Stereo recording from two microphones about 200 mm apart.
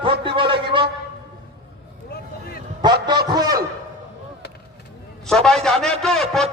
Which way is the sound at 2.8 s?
20° right (ahead or behind).